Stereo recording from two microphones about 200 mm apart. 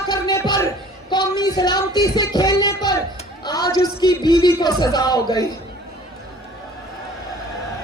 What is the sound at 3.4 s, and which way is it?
Speech, 20° left (ahead or behind).